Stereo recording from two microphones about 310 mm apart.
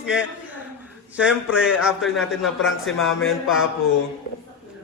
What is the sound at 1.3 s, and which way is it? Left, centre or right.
Speech, left.